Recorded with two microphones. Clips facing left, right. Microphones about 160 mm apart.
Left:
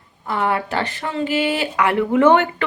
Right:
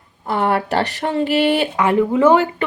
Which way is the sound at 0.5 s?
35° right (ahead or behind).